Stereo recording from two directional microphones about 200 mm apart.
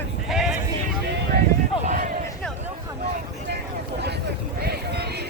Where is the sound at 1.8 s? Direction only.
40° right (ahead or behind).